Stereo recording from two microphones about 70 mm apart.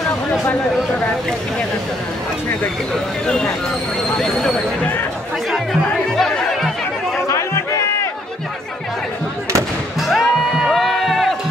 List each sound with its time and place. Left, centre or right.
3.3 s speech: centre
5.5 s music: centre
7.2 s run: left
9.9 s music: centre